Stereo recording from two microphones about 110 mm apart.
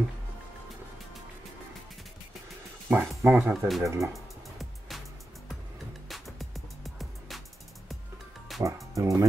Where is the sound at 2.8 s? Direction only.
20° right (ahead or behind).